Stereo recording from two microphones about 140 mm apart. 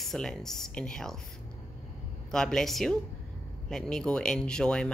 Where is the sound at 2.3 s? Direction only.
5° left (ahead or behind).